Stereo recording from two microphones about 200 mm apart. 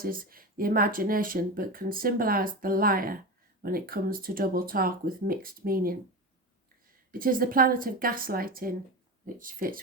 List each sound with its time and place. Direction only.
0.0 s speech: 45° right (ahead or behind)
7.1 s speech: 45° right (ahead or behind)